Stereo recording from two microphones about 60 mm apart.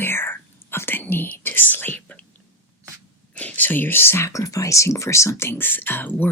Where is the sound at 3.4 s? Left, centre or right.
Left.